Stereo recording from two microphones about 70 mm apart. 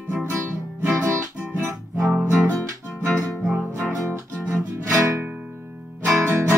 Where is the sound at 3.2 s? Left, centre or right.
Right.